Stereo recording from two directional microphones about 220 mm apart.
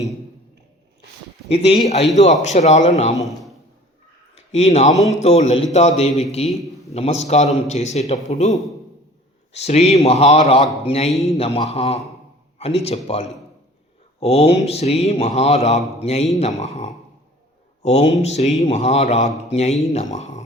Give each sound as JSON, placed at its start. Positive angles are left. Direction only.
{"t": 1.5, "sound": "a man's voice", "side_deg": 25}
{"t": 4.5, "sound": "a man's voice", "side_deg": 30}
{"t": 6.5, "sound": "a sound", "side_deg": 0}
{"t": 6.9, "sound": "a man's voice", "side_deg": 30}